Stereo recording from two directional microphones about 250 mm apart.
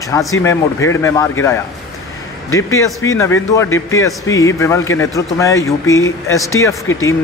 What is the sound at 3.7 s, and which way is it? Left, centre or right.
Speech, left.